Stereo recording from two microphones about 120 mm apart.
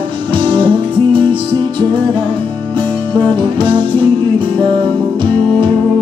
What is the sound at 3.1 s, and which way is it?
Music, 45° right (ahead or behind).